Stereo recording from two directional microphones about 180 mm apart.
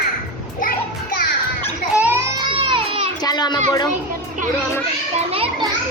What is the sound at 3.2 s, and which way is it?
Children playing, 25° left (ahead or behind).